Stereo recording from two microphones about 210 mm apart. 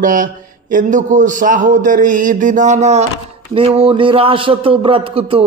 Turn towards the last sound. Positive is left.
turn(degrees=-25)  # may be behind; listen again after turning